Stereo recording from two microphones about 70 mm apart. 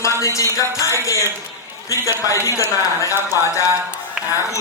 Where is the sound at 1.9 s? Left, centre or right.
Left.